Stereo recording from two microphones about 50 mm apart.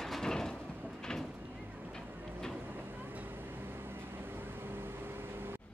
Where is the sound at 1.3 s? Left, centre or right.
Right.